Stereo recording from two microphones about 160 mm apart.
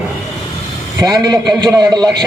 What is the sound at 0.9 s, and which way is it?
A man's voice, 25° right (ahead or behind).